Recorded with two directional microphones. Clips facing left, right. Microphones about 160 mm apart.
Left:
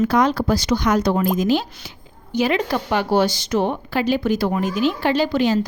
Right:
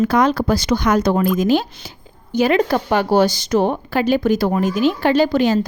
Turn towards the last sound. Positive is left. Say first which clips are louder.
# right 3 dB
turn(degrees=-45)  # may be behind; listen again after turning